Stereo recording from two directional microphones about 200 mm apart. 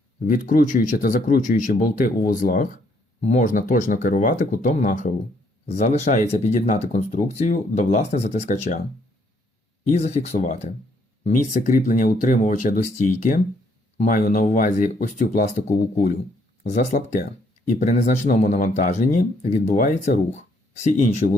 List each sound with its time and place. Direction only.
0.3 s speech: 45° left (ahead or behind)
9.8 s speech: 35° left (ahead or behind)
16.6 s speech: 35° left (ahead or behind)